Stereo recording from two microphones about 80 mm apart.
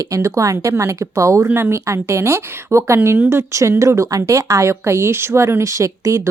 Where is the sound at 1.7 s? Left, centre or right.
Right.